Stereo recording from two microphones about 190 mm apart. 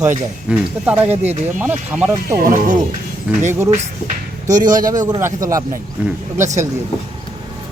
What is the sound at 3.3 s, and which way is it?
Speech, 5° right (ahead or behind).